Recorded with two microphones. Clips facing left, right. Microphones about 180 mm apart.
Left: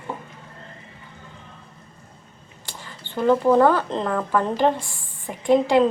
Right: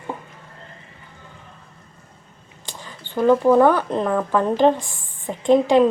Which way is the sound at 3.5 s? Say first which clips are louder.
Right 2 dB; 15° right (ahead or behind).